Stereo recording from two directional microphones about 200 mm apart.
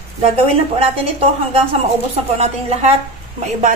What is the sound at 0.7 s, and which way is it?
A woman's voice, 30° right (ahead or behind).